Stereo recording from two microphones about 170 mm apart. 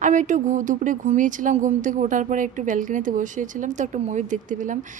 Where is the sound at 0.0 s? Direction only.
45° right (ahead or behind).